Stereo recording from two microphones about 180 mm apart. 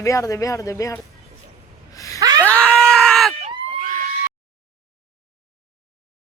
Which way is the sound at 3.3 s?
50° right (ahead or behind).